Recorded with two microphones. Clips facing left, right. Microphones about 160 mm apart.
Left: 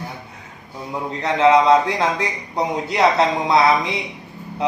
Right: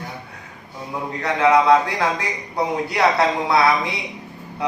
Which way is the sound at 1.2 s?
20° left (ahead or behind).